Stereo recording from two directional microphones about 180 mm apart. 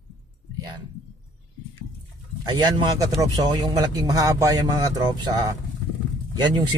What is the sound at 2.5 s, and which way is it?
Speech, 25° right (ahead or behind).